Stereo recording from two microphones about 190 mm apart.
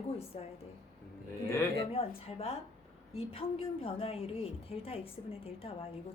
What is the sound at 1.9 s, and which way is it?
A woman's voice, 30° left (ahead or behind).